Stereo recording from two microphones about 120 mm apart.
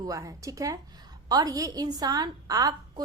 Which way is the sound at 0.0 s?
30° right (ahead or behind).